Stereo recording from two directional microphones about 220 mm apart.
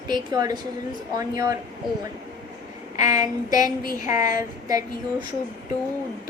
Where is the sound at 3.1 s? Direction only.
15° right (ahead or behind).